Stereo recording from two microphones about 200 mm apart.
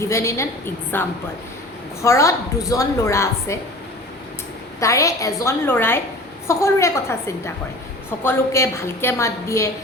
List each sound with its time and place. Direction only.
0.0 s a woman's voice: 15° left (ahead or behind)
4.8 s a woman's voice: 15° left (ahead or behind)